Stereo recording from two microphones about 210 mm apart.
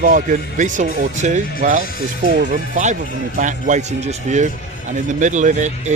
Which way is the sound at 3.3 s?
35° right (ahead or behind).